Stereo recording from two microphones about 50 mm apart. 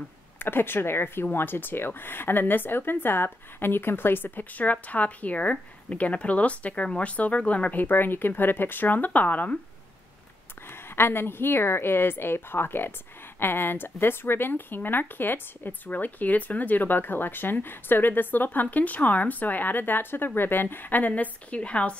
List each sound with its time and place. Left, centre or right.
0.4 s speech: left
10.7 s speech: left